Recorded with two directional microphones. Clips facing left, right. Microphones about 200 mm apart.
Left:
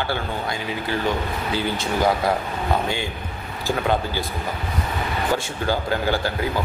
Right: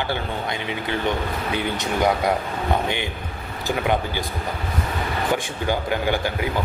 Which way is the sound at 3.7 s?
15° right (ahead or behind).